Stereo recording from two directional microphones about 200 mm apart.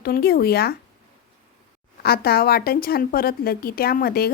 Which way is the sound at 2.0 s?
50° left (ahead or behind).